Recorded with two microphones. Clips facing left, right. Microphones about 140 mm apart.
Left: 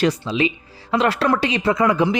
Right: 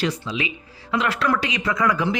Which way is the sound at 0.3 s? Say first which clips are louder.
Left 7 dB; 30° left (ahead or behind).